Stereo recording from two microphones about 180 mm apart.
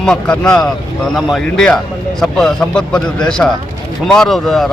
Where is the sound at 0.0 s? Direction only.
5° left (ahead or behind).